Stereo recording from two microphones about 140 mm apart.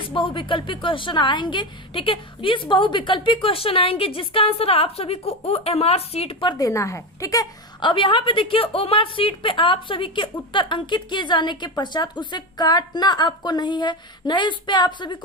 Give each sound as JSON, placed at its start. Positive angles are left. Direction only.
{"t": 0.0, "sound": "a woman's voice", "side_deg": 35}
{"t": 6.7, "sound": "a woman's voice", "side_deg": 20}